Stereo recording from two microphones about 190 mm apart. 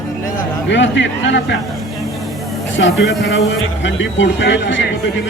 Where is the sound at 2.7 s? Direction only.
70° left (ahead or behind).